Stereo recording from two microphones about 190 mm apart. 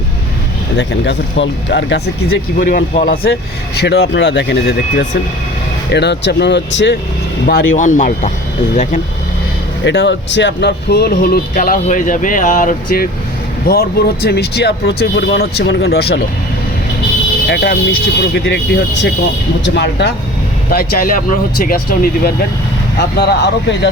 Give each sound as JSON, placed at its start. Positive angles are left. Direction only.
{"t": 0.8, "sound": "speech", "side_deg": 70}
{"t": 2.6, "sound": "speech", "side_deg": 45}
{"t": 3.8, "sound": "speech", "side_deg": 60}
{"t": 7.8, "sound": "speech", "side_deg": 40}
{"t": 9.8, "sound": "speech", "side_deg": 70}
{"t": 17.4, "sound": "speech", "side_deg": 60}
{"t": 20.7, "sound": "speech", "side_deg": 50}